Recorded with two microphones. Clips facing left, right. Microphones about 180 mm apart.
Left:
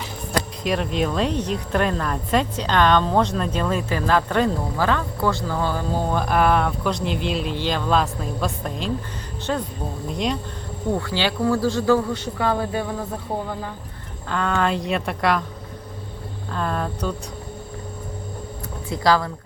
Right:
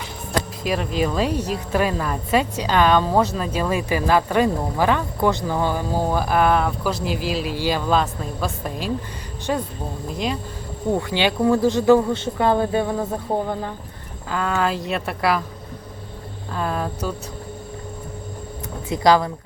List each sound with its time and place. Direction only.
0.6 s a woman's voice: centre (ahead or behind)
10.9 s speech: 15° right (ahead or behind)
14.3 s a woman's voice: 5° right (ahead or behind)
16.5 s a woman's voice: 5° right (ahead or behind)
18.9 s speech: 20° right (ahead or behind)